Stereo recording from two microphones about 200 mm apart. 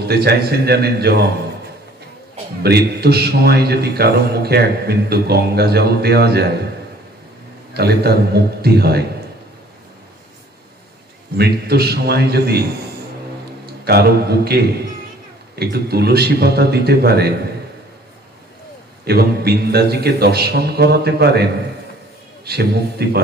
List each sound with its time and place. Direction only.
0.1 s a man's voice: 50° right (ahead or behind)
2.6 s a man's voice: 55° right (ahead or behind)
7.7 s a man's voice: 55° right (ahead or behind)
11.3 s a man's voice: 55° right (ahead or behind)
13.7 s a man's voice: 55° right (ahead or behind)
19.0 s a man's voice: 55° right (ahead or behind)